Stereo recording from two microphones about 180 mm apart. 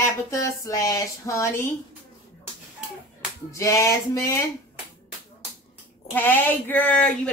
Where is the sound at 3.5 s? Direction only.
15° left (ahead or behind).